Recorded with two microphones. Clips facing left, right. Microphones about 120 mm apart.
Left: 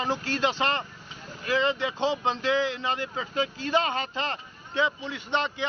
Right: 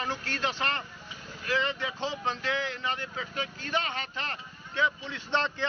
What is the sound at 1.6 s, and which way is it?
Speech, 30° left (ahead or behind).